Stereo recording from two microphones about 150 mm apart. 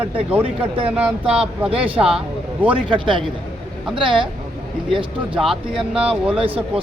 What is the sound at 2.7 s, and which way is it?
Speech, 35° right (ahead or behind).